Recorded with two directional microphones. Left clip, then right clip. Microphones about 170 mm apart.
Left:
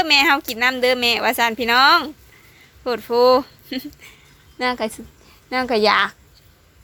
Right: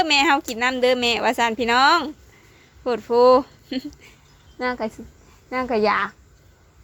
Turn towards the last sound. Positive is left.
turn(degrees=15)  # may be behind; listen again after turning